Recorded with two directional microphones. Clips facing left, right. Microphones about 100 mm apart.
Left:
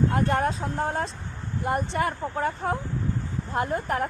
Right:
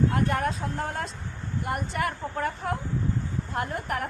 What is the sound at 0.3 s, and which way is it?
Speech, 30° left (ahead or behind).